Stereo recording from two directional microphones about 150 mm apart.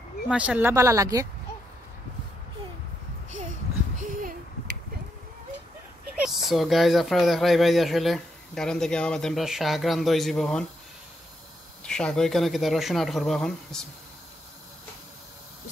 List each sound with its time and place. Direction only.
0.3 s speech: 10° right (ahead or behind)
6.2 s speech: centre (ahead or behind)
11.8 s speech: 5° left (ahead or behind)